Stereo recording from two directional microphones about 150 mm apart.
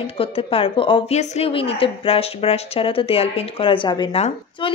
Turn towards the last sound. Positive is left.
turn(degrees=30)  # may be behind; listen again after turning